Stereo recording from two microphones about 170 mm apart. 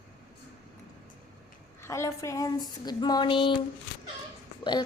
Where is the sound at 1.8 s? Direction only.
15° left (ahead or behind).